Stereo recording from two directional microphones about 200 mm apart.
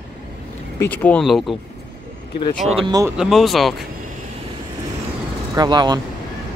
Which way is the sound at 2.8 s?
20° right (ahead or behind).